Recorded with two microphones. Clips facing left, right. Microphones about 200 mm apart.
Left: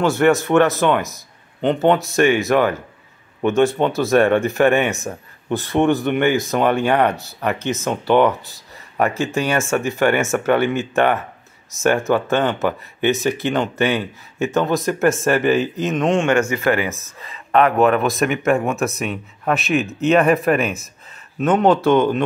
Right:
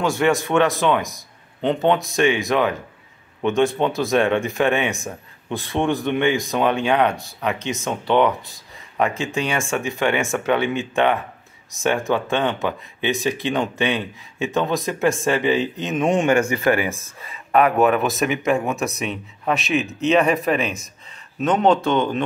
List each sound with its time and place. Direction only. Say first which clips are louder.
0.0 s speech: left 4 dB; 5° left (ahead or behind)
3.8 s speech: left 3 dB; centre (ahead or behind)
16.1 s a man's voice: even; 15° right (ahead or behind)
16.4 s speech: even; 30° right (ahead or behind)
16.7 s speech: left 1 dB; 15° right (ahead or behind); by 22.2 s 5° left (ahead or behind)